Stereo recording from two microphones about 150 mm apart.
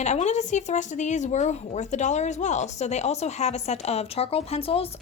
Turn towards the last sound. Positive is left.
turn(degrees=40)  # may be behind; listen again after turning